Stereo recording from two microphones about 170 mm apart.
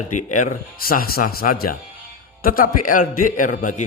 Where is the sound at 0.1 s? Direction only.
50° left (ahead or behind).